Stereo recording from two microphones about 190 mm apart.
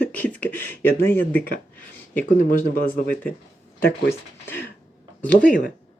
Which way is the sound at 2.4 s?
50° left (ahead or behind).